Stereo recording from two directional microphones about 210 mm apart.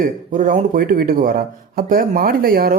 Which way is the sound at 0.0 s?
40° right (ahead or behind).